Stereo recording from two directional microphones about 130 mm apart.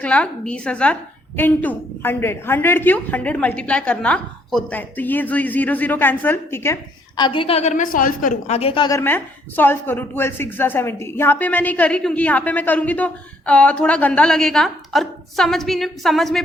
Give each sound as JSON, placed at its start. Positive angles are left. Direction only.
{"t": 0.0, "sound": "speech", "side_deg": 10}
{"t": 7.2, "sound": "a woman's voice", "side_deg": 40}
{"t": 8.5, "sound": "a woman's voice", "side_deg": 45}
{"t": 8.9, "sound": "speech", "side_deg": 15}